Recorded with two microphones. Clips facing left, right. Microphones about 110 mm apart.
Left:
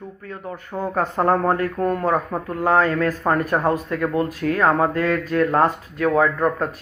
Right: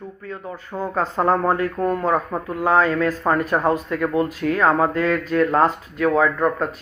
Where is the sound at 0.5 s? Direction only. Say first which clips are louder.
Left 1 dB; 20° left (ahead or behind).